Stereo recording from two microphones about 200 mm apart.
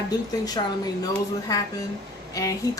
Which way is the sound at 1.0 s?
15° left (ahead or behind).